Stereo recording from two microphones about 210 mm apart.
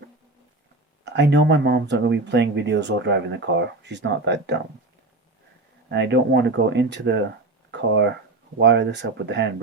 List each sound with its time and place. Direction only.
1.0 s speech: 55° right (ahead or behind)
5.9 s speech: 55° right (ahead or behind)